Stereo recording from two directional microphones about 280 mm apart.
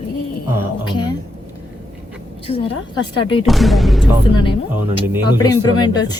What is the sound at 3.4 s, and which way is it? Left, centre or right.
Speech, centre.